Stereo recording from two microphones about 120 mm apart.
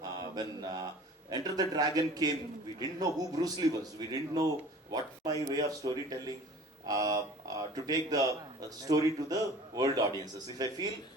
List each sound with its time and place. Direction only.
0.0 s mantra: 35° right (ahead or behind)
1.3 s a man's voice: 35° right (ahead or behind)